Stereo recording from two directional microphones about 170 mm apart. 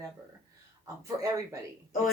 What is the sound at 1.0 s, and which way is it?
Speech, 20° right (ahead or behind).